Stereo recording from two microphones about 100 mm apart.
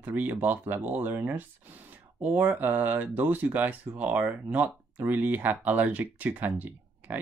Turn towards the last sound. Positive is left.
turn(degrees=-15)  # may be behind; listen again after turning